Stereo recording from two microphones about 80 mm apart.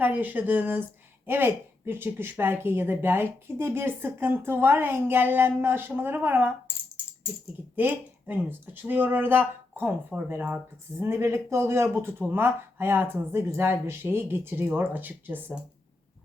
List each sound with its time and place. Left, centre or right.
0.0 s speech: right
7.8 s speech: right